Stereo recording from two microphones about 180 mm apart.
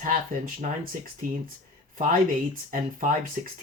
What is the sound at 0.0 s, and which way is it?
Speech, 50° right (ahead or behind).